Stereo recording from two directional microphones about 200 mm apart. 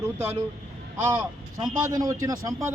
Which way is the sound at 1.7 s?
15° right (ahead or behind).